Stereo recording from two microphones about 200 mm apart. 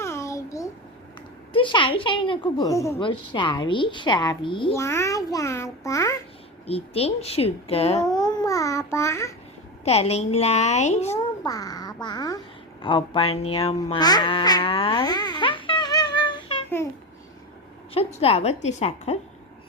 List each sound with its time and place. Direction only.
0.0 s babbling: 15° left (ahead or behind)
1.5 s a woman's voice: 25° left (ahead or behind)
4.7 s a child's voice: 15° left (ahead or behind)
6.7 s a woman's voice: 30° left (ahead or behind)
8.0 s babbling: 20° left (ahead or behind)
8.9 s a child's voice: 15° left (ahead or behind)
9.8 s a woman's voice: 30° left (ahead or behind)
11.4 s babbling: 20° left (ahead or behind)
12.0 s a woman's voice: 20° left (ahead or behind)
13.8 s a sound: 20° left (ahead or behind)
17.9 s a woman's voice: 30° left (ahead or behind)